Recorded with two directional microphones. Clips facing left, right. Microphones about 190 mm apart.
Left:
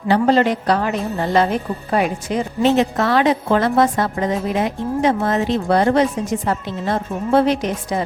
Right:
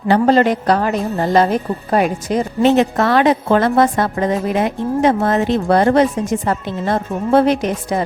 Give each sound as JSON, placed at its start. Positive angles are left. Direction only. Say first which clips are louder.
{"t": 0.1, "sound": "a woman's voice", "louder": "right 2 dB", "side_deg": -45}
{"t": 2.6, "sound": "a woman's voice", "louder": "right 3 dB", "side_deg": -55}